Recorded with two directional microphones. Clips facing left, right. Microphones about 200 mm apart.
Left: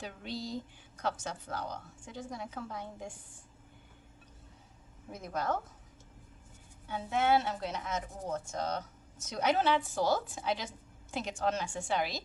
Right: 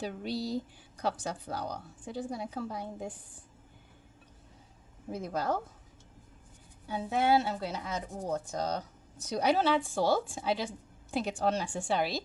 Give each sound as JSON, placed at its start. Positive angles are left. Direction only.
{"t": 0.0, "sound": "a woman's voice", "side_deg": -35}
{"t": 5.1, "sound": "a woman's voice", "side_deg": -30}
{"t": 6.8, "sound": "a woman's voice", "side_deg": -35}